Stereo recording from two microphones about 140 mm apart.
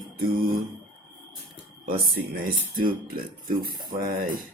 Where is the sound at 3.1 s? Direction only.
90° right.